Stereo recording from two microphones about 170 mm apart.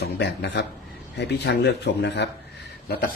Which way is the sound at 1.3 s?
75° left (ahead or behind).